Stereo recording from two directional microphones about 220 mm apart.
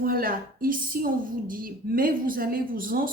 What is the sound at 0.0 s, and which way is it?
A woman's voice, 40° right (ahead or behind).